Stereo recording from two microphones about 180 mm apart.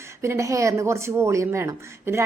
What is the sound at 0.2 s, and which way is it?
A woman's voice, 15° right (ahead or behind).